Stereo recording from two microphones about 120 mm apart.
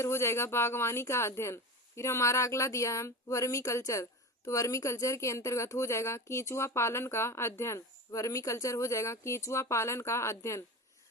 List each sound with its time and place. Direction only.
0.0 s speech: 20° left (ahead or behind)